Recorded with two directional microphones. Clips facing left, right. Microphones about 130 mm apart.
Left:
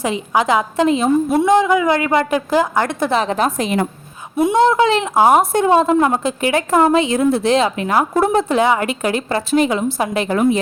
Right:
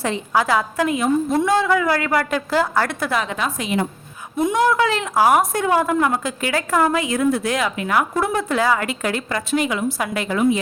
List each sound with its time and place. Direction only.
0.0 s a woman's voice: 15° left (ahead or behind)
3.3 s a woman's voice: 45° left (ahead or behind)
4.5 s a woman's voice: 25° left (ahead or behind)
9.5 s a woman's voice: 30° left (ahead or behind)
10.3 s a woman's voice: 45° left (ahead or behind)